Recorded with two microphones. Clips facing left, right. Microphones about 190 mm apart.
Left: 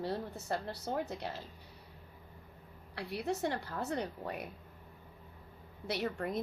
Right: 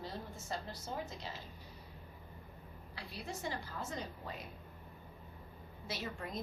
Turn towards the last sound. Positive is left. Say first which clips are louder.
# left 7 dB
turn(degrees=60)  # may be behind; listen again after turning